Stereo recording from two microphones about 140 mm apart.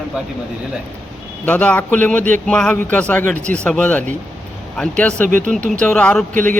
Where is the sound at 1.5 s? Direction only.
10° left (ahead or behind).